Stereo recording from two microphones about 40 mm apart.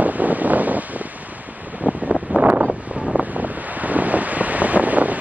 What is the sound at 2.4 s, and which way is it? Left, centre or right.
Wind, right.